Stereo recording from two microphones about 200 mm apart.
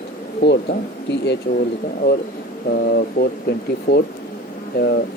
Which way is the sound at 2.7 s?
50° left (ahead or behind).